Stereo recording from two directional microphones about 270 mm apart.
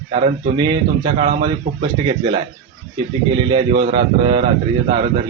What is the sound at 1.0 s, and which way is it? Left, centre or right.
Speech, centre.